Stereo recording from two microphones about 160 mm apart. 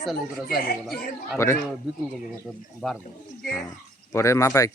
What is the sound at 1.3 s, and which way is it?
Speech, 15° left (ahead or behind).